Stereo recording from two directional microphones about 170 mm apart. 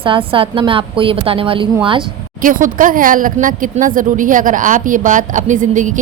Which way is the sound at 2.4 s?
50° right (ahead or behind).